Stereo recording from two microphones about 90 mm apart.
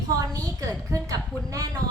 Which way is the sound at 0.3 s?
40° right (ahead or behind).